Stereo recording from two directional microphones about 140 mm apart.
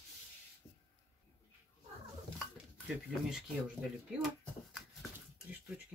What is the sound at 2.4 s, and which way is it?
Dishes, 5° right (ahead or behind).